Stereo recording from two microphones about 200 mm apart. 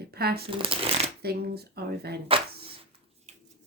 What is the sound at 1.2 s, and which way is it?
Speech, 50° right (ahead or behind).